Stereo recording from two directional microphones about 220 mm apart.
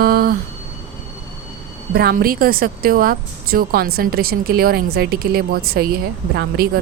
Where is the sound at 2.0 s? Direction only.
45° right (ahead or behind).